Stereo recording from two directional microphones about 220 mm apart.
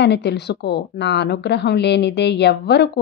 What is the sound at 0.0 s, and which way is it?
Speech, 50° left (ahead or behind).